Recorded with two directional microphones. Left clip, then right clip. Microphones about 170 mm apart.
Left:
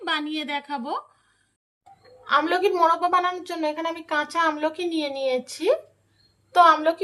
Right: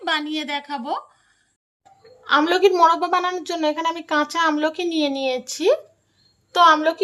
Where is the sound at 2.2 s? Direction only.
45° right (ahead or behind).